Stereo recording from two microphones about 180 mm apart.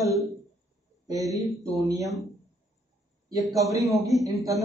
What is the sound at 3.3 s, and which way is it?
Speech, 20° right (ahead or behind).